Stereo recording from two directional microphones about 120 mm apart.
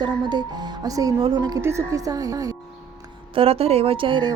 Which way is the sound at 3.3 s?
55° right (ahead or behind).